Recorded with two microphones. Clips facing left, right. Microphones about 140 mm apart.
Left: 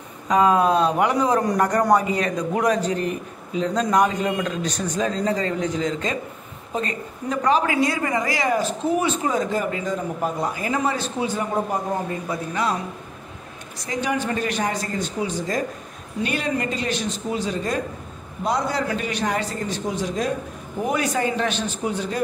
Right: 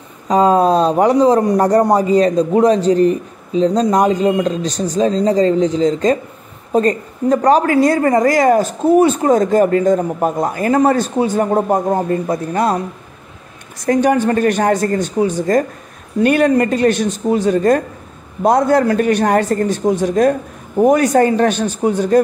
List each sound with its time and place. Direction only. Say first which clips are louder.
0.3 s a man's voice: right 6 dB; 35° right (ahead or behind)
13.8 s a woman's voice: right 11 dB; 50° right (ahead or behind)